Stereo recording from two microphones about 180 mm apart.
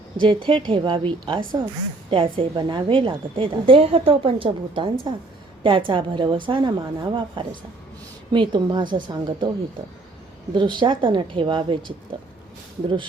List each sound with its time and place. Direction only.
0.2 s a woman's voice: 25° right (ahead or behind)
10.5 s a woman's voice: 25° right (ahead or behind)